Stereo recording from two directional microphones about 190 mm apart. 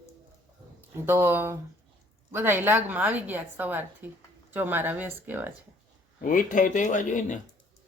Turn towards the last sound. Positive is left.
turn(degrees=40)  # may be behind; listen again after turning